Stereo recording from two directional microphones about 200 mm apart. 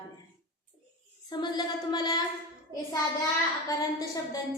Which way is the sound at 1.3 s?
20° left (ahead or behind).